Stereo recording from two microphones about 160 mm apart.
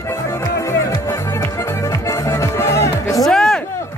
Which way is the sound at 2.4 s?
15° left (ahead or behind).